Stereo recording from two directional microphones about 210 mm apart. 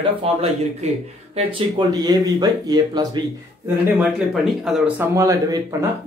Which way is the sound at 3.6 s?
10° right (ahead or behind).